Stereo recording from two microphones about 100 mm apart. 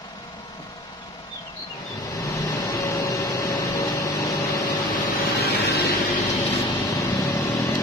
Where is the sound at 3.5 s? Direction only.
35° left (ahead or behind).